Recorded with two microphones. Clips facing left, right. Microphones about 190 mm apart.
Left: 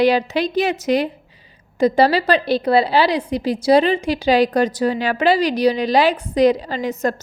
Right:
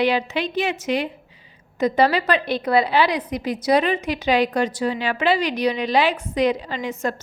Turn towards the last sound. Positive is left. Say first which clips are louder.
# left 4 dB
turn(degrees=40)  # may be behind; listen again after turning